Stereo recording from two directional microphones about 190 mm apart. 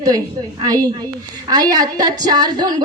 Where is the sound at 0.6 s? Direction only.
20° right (ahead or behind).